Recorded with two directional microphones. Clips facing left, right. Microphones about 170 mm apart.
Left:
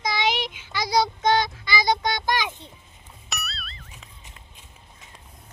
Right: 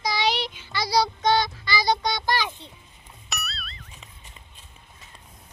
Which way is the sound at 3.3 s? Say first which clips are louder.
Even; centre (ahead or behind).